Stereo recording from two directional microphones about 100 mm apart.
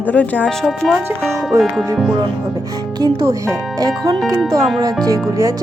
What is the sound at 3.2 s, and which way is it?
Speech, 35° right (ahead or behind).